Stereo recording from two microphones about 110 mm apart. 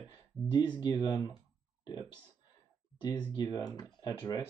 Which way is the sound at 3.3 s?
35° left (ahead or behind).